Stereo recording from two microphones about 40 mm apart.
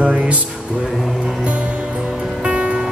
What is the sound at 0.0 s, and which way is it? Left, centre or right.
Music, right.